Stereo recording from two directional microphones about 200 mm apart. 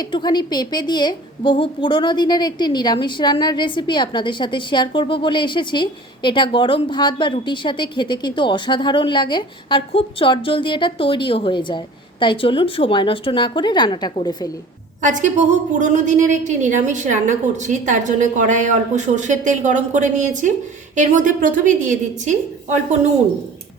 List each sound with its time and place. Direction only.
0.0 s a woman's voice: 20° left (ahead or behind)
15.0 s a woman's voice: 40° right (ahead or behind)